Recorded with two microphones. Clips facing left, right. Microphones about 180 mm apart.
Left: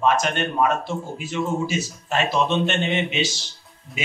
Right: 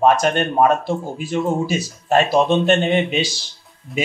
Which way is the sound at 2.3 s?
50° right (ahead or behind).